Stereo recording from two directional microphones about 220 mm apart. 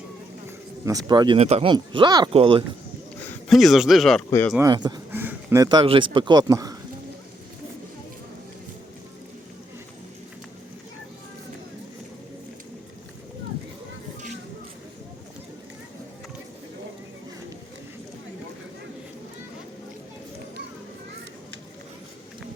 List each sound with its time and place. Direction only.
0.9 s speech: 15° right (ahead or behind)
3.2 s speech: centre (ahead or behind)
4.3 s speech: 10° left (ahead or behind)
4.5 s speech: 15° right (ahead or behind)
5.1 s a sound: 10° right (ahead or behind)
5.6 s speech: 20° right (ahead or behind)